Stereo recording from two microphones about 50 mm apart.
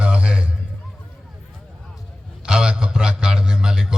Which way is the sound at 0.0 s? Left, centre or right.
Centre.